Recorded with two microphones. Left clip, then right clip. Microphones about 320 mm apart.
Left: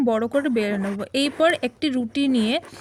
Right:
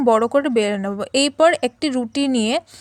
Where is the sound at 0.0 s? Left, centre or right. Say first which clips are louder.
Right 6 dB; right.